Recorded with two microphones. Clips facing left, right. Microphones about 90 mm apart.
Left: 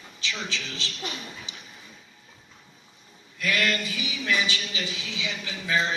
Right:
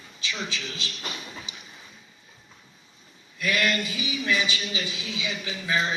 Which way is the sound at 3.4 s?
20° right (ahead or behind).